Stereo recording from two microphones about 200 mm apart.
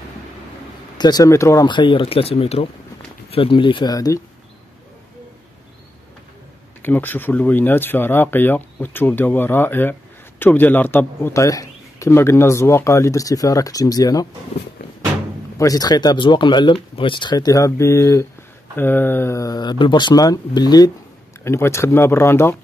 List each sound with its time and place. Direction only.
0.9 s speech: 20° left (ahead or behind)
6.8 s a man's voice: 10° left (ahead or behind)
15.5 s a man's voice: 15° left (ahead or behind)